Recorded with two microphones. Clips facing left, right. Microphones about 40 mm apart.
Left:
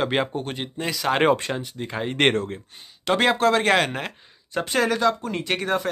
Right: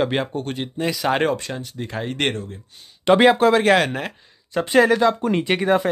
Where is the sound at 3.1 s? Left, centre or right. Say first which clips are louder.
Right 5 dB; centre.